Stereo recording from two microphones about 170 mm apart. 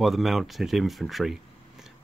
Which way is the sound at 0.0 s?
Centre (ahead or behind).